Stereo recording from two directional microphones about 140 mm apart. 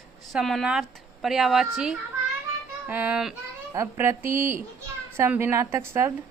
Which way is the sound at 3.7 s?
20° right (ahead or behind).